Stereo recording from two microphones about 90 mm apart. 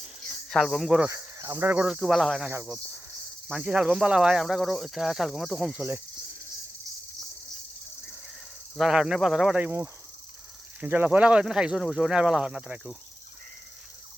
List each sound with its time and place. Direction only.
0.5 s speech: centre (ahead or behind)
1.1 s speech: 35° right (ahead or behind)
1.7 s speech: 15° right (ahead or behind)
2.5 s speech: 25° right (ahead or behind)
3.5 s speech: 10° right (ahead or behind)
8.7 s speech: 5° right (ahead or behind)
9.6 s speech: 25° right (ahead or behind)